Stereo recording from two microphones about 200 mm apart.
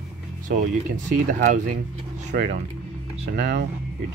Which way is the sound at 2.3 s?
50° right (ahead or behind).